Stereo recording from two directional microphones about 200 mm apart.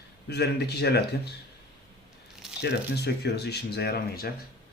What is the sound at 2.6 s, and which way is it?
Speech, 55° left (ahead or behind).